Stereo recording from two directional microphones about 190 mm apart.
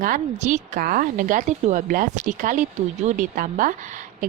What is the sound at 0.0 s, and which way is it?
A woman's voice, 45° right (ahead or behind).